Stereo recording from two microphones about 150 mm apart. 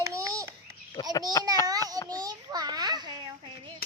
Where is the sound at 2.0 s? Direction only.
25° right (ahead or behind).